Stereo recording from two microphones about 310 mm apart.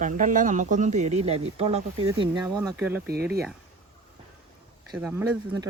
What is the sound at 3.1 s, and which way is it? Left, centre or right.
Speech, right.